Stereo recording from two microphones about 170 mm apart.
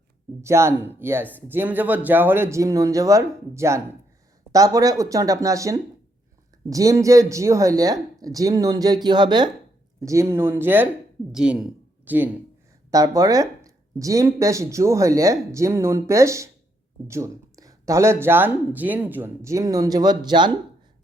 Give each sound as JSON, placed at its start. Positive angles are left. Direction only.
{"t": 0.4, "sound": "speech", "side_deg": -15}
{"t": 12.9, "sound": "speech", "side_deg": -20}